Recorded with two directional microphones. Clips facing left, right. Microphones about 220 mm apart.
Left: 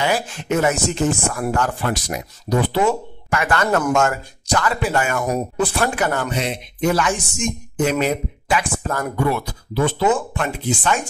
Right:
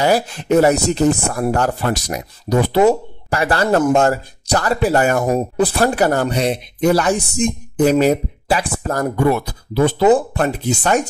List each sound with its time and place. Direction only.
0.0 s speech: 40° right (ahead or behind)